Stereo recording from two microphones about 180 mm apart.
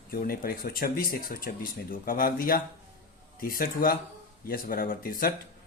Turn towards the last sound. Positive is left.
turn(degrees=55)  # may be behind; listen again after turning